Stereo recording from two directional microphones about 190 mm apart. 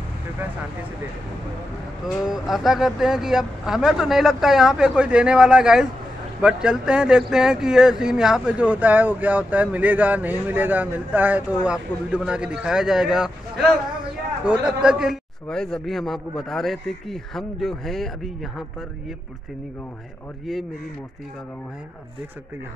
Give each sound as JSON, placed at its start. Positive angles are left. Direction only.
{"t": 2.2, "sound": "a man's voice", "side_deg": 0}
{"t": 14.4, "sound": "a man's voice", "side_deg": -5}